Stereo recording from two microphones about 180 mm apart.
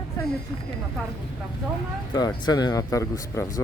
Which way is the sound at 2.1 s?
25° left (ahead or behind).